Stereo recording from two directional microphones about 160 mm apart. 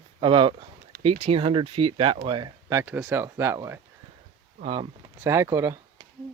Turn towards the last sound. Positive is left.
turn(degrees=-20)  # may be behind; listen again after turning